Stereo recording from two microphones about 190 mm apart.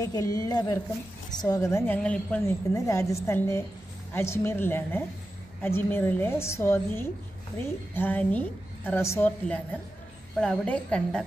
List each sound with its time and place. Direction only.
0.0 s a woman's voice: 20° left (ahead or behind)